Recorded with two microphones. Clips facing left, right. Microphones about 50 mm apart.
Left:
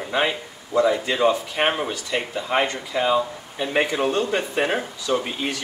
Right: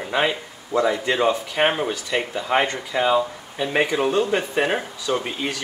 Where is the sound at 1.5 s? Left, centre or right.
Centre.